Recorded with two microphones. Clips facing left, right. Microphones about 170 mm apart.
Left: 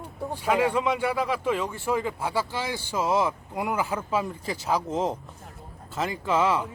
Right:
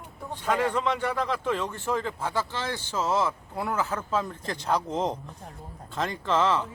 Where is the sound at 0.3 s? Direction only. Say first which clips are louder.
Left 2 dB; 10° left (ahead or behind).